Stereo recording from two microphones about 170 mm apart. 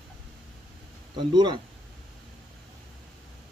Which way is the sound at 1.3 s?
25° right (ahead or behind).